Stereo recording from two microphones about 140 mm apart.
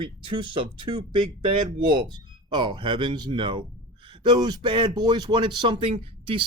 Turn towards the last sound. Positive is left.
turn(degrees=-40)  # may be behind; listen again after turning